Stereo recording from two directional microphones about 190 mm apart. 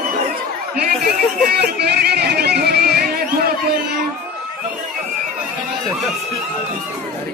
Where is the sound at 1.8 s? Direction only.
55° right (ahead or behind).